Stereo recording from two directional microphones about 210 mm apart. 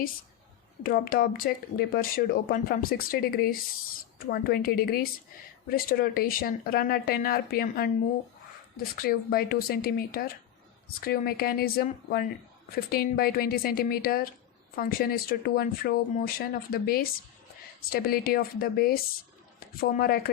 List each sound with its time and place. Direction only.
0.8 s speech: 45° left (ahead or behind)